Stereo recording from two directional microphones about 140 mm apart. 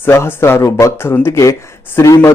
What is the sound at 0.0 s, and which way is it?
Speech, 15° left (ahead or behind).